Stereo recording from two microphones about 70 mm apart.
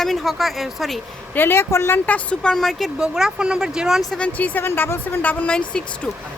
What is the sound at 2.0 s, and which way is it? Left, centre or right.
Speech, centre.